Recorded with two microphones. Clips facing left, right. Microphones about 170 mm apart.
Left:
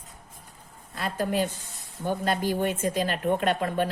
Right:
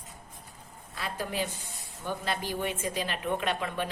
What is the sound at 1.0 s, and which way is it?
Speech, 45° left (ahead or behind).